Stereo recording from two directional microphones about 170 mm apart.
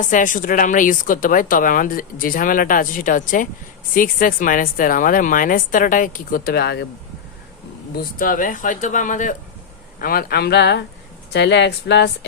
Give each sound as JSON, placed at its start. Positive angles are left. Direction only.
{"t": 0.0, "sound": "speech", "side_deg": 50}
{"t": 7.9, "sound": "speech", "side_deg": 55}
{"t": 10.0, "sound": "speech", "side_deg": 60}